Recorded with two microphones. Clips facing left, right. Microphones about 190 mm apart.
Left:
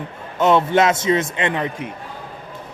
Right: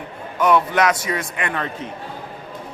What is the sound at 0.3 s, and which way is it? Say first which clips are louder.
A man's voice: left 2 dB; 25° left (ahead or behind).